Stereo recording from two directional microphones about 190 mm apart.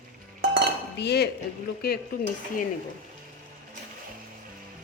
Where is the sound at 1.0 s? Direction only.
60° left (ahead or behind).